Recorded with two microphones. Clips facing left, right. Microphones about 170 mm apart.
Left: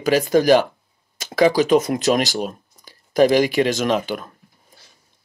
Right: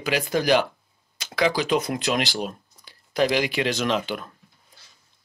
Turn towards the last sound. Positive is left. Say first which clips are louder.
# left 4 dB
turn(degrees=45)  # may be behind; listen again after turning